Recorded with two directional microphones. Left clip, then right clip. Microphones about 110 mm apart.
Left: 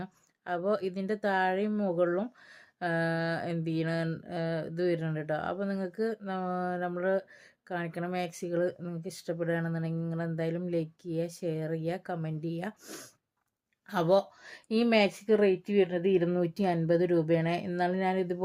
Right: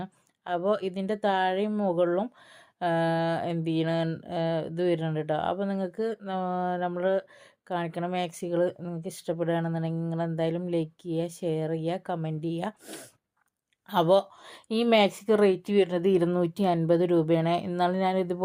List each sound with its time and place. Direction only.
0.0 s a woman's voice: 25° right (ahead or behind)
16.3 s a woman's voice: 30° right (ahead or behind)